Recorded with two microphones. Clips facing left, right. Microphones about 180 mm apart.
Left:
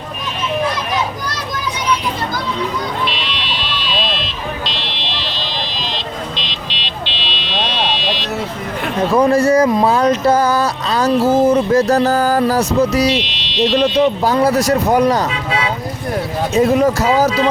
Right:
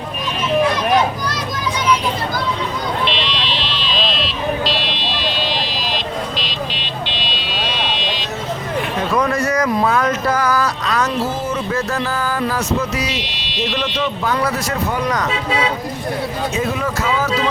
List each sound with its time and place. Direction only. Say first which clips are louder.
9.1 s speech: left 7 dB; 30° left (ahead or behind)
14.3 s speech: left 7 dB; 30° left (ahead or behind)
16.6 s speech: left 11 dB; 40° left (ahead or behind)